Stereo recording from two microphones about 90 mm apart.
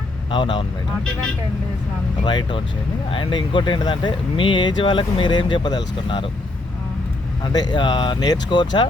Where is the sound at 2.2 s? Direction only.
65° left (ahead or behind).